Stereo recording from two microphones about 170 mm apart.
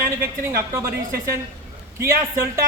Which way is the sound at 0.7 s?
15° right (ahead or behind).